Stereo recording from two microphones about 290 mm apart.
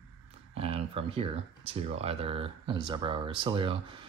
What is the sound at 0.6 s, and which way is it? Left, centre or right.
Speech, centre.